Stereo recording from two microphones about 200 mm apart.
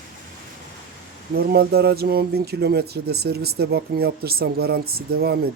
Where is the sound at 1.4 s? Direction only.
50° right (ahead or behind).